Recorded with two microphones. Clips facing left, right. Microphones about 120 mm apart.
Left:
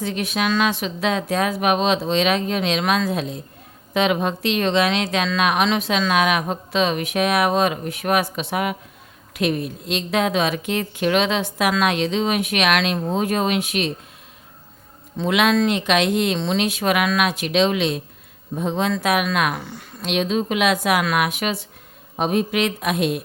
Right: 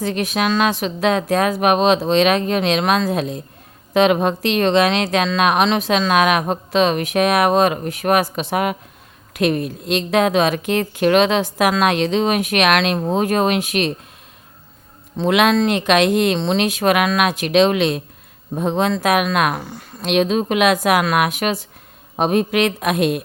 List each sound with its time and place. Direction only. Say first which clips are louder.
0.0 s a woman's voice: right 3 dB; 45° right (ahead or behind)
15.3 s a woman's voice: right 3 dB; 50° right (ahead or behind)
18.9 s a woman's voice: right 3 dB; 45° right (ahead or behind)
20.1 s a woman's voice: right 4 dB; 55° right (ahead or behind)
22.1 s speech: right 3 dB; 55° right (ahead or behind)